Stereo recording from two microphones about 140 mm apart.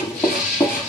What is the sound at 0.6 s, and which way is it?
Music, 10° left (ahead or behind).